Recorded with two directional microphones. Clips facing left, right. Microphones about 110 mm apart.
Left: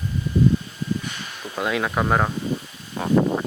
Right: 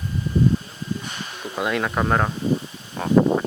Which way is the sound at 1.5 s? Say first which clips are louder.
Even; centre (ahead or behind).